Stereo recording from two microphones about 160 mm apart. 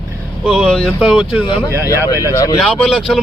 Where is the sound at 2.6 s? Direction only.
Centre (ahead or behind).